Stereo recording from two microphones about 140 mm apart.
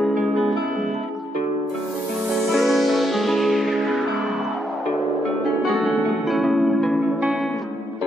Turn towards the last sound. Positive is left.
turn(degrees=0)  # may be behind; listen again after turning